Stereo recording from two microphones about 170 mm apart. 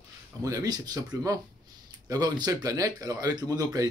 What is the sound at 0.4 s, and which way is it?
Speech, 20° right (ahead or behind).